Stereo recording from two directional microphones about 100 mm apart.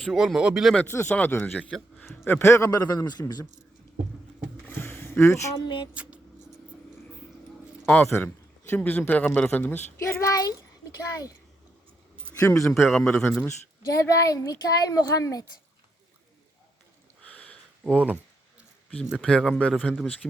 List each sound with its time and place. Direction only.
0.0 s speech: centre (ahead or behind)
0.9 s speech: 25° left (ahead or behind); by 3.4 s 40° left (ahead or behind)
4.7 s a sound: 20° left (ahead or behind)
5.5 s speech: 50° left (ahead or behind)
5.9 s speech: 10° right (ahead or behind)
7.9 s a man's voice: 20° left (ahead or behind)
10.0 s speech: 30° left (ahead or behind)
12.4 s speech: 30° left (ahead or behind)
12.6 s speech: centre (ahead or behind)
13.1 s a man's voice: 10° left (ahead or behind)
14.0 s speech: 35° left (ahead or behind)
17.3 s a sound: 15° left (ahead or behind)
17.9 s speech: 15° right (ahead or behind)
19.2 s a man's voice: 10° left (ahead or behind)